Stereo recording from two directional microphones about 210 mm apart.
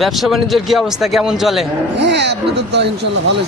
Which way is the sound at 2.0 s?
55° right (ahead or behind).